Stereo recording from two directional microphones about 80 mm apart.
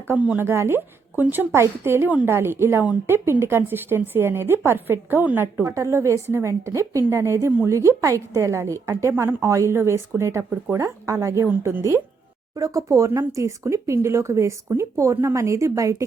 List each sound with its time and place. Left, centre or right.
0.1 s a woman's voice: right
5.6 s a woman's voice: right
12.5 s a woman's voice: right